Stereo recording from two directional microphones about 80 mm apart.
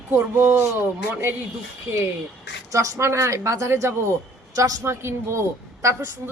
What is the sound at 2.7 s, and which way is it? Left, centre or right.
Speech, right.